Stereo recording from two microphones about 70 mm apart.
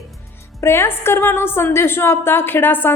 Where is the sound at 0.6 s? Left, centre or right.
Left.